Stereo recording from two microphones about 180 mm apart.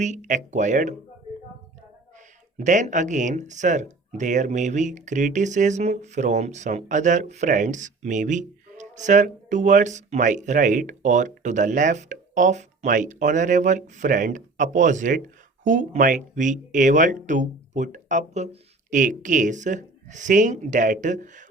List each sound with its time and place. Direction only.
0.0 s speech: 45° right (ahead or behind)
2.6 s speech: 40° right (ahead or behind)